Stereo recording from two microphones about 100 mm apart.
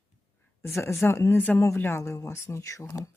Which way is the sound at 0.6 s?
30° left (ahead or behind).